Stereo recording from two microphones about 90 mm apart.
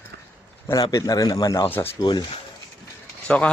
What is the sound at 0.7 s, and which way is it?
Speech, 45° left (ahead or behind).